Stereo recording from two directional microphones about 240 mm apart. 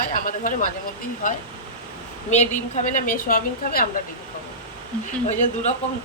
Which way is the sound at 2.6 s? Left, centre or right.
Left.